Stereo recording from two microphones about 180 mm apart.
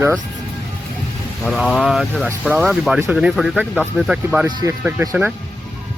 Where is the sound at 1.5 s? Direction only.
Centre (ahead or behind).